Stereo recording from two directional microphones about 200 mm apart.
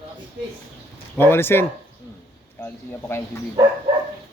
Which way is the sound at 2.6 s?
15° left (ahead or behind).